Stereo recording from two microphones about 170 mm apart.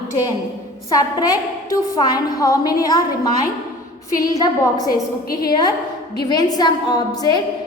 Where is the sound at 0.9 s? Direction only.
20° left (ahead or behind).